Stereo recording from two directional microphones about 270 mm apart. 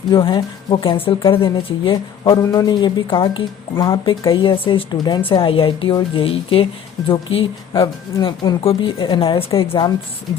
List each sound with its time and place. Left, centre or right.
0.1 s speech: centre